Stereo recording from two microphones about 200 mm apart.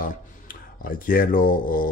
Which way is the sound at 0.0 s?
45° left (ahead or behind).